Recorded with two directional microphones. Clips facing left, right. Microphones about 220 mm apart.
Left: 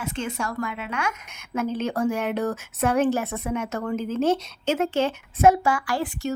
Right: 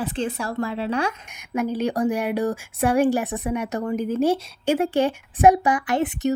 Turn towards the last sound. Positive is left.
turn(degrees=-20)  # may be behind; listen again after turning